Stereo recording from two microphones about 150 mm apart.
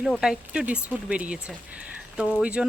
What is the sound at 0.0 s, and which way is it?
Speech, 5° right (ahead or behind).